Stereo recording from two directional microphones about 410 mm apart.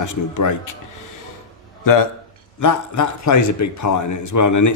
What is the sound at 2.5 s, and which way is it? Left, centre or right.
A man's voice, left.